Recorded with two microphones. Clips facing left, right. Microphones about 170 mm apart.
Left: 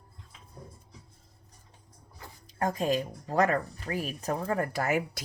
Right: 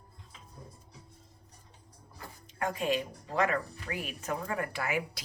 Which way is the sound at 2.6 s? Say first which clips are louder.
Left 3 dB; 40° left (ahead or behind).